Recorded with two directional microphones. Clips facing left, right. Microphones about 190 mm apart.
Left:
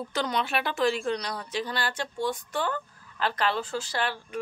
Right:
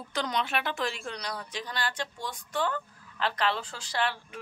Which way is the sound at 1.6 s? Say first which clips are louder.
Left 3 dB; 65° left (ahead or behind).